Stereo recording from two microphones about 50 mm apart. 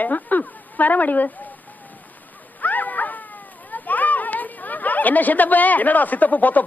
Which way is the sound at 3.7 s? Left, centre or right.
Left.